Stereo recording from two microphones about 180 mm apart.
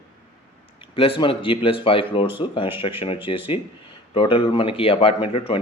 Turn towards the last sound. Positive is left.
turn(degrees=30)  # may be behind; listen again after turning